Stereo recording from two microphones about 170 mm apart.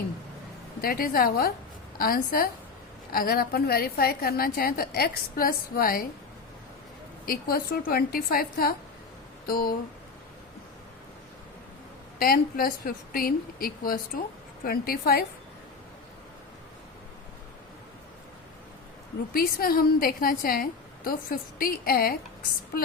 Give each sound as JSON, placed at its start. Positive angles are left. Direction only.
{"t": 0.8, "sound": "a woman's voice", "side_deg": 60}
{"t": 7.3, "sound": "a woman's voice", "side_deg": 60}
{"t": 12.2, "sound": "a woman's voice", "side_deg": 60}
{"t": 19.3, "sound": "a woman's voice", "side_deg": 60}